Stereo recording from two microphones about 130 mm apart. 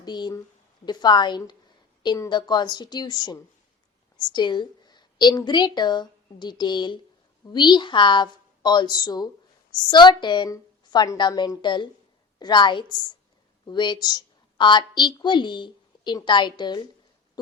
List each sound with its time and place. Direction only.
0.0 s a woman's voice: 35° left (ahead or behind)